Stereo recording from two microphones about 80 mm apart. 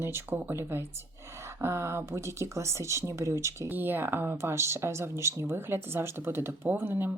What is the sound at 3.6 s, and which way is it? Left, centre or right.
Speech, right.